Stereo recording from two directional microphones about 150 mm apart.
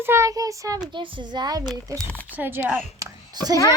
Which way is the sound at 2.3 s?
10° right (ahead or behind).